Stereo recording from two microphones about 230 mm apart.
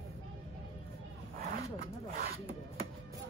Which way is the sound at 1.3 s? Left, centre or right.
Right.